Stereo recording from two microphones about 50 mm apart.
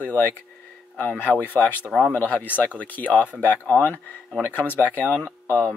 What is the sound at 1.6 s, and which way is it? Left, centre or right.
Speech, left.